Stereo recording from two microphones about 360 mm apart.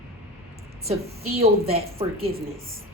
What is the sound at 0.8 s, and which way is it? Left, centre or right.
A woman's voice, centre.